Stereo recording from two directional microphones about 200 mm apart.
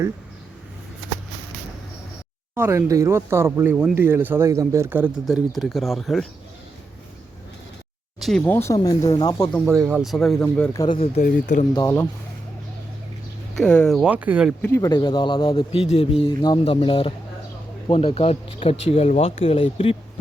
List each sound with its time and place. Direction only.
2.6 s speech: 15° right (ahead or behind)
8.2 s speech: 5° left (ahead or behind); by 9.5 s 20° left (ahead or behind)
9.6 s speech: 15° right (ahead or behind)
10.0 s speech: centre (ahead or behind)
11.0 s speech: 40° left (ahead or behind)
11.7 s speech: 15° left (ahead or behind)
13.6 s speech: 5° left (ahead or behind)
14.6 s speech: 15° left (ahead or behind)